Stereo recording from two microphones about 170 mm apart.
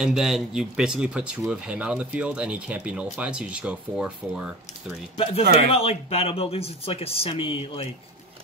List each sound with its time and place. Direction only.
0.0 s speech: centre (ahead or behind)
5.1 s speech: 35° left (ahead or behind)